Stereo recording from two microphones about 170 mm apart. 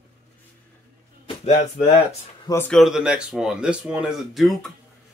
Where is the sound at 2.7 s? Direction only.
Centre (ahead or behind).